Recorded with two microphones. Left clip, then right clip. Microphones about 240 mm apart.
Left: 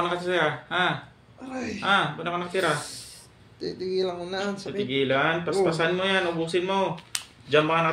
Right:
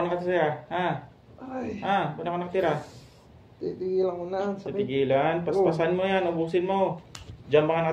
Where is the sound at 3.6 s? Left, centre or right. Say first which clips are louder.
Right 1 dB; left.